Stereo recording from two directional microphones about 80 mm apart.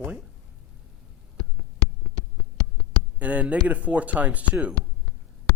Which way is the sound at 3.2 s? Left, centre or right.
Centre.